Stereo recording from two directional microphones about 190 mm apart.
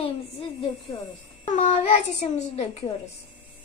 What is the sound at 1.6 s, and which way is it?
A woman's voice, 40° left (ahead or behind).